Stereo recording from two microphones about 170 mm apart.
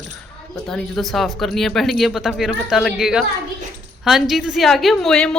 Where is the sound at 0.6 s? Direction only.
Centre (ahead or behind).